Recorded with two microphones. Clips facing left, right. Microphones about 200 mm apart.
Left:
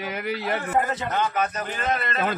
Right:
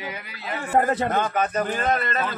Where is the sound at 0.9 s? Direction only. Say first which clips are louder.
Right 3 dB; 55° right (ahead or behind).